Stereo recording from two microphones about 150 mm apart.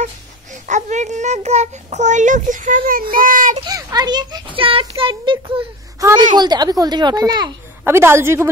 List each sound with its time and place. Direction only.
0.7 s a child's voice: 55° right (ahead or behind)
3.6 s a child's voice: 25° right (ahead or behind)
7.8 s a woman's voice: 15° right (ahead or behind)